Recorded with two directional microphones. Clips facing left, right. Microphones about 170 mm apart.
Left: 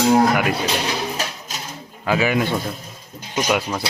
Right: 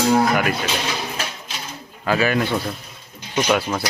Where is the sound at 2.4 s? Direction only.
Centre (ahead or behind).